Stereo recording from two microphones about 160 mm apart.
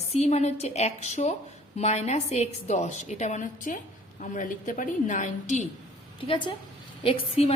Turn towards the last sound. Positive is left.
turn(degrees=35)  # may be behind; listen again after turning